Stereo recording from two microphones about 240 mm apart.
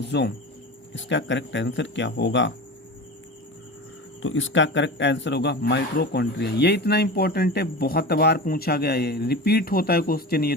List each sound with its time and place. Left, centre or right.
0.0 s speech: left
4.2 s speech: left